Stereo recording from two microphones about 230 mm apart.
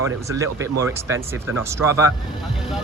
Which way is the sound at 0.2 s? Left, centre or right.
Centre.